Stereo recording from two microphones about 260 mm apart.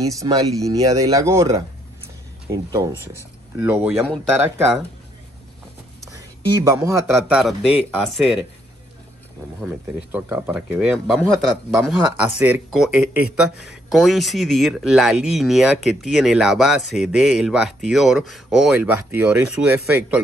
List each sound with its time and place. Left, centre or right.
0.0 s speech: centre
6.6 s speech: centre
9.6 s speech: centre